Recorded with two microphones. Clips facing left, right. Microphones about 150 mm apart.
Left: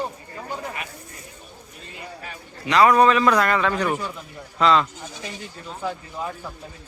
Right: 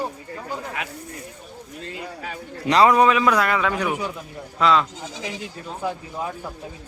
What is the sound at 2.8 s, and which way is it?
A man's voice, 10° right (ahead or behind).